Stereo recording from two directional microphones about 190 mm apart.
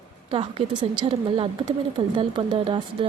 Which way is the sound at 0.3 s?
25° right (ahead or behind).